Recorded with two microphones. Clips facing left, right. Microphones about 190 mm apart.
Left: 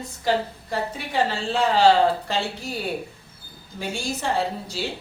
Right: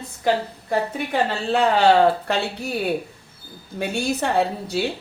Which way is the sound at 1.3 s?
60° right (ahead or behind).